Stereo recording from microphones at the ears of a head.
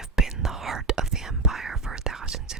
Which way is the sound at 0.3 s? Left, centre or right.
Right.